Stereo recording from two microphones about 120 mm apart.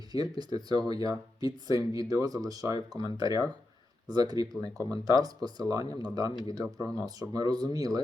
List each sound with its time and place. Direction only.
0.1 s speech: 35° right (ahead or behind)